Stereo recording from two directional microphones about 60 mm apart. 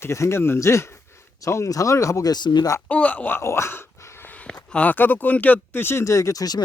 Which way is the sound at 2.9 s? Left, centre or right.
Left.